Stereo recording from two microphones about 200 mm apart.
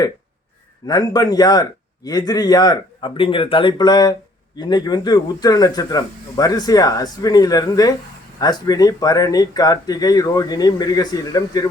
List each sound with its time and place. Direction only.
0.9 s speech: 20° left (ahead or behind)